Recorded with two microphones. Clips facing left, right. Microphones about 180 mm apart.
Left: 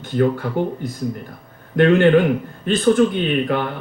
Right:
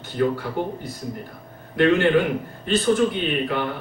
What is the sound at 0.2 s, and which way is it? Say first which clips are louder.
Speech: left 4 dB; 50° left (ahead or behind).